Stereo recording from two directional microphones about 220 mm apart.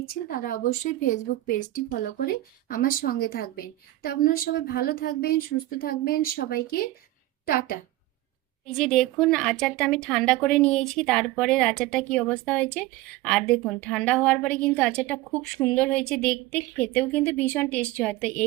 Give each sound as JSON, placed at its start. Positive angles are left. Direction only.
{"t": 0.1, "sound": "a woman's voice", "side_deg": 40}
{"t": 8.6, "sound": "speech", "side_deg": 0}